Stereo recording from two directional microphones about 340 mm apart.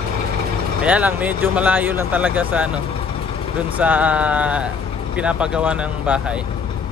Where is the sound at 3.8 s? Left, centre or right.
Centre.